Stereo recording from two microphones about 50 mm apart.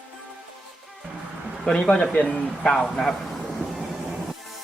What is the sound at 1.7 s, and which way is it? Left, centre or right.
Speech, centre.